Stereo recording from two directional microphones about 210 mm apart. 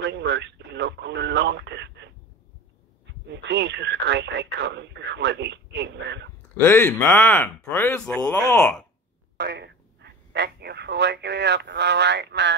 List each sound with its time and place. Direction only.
0.0 s radio: 55° right (ahead or behind)
3.3 s speech: 55° right (ahead or behind)
6.5 s speech: 10° left (ahead or behind)
8.4 s speech: 15° left (ahead or behind)
9.4 s speech: 55° right (ahead or behind)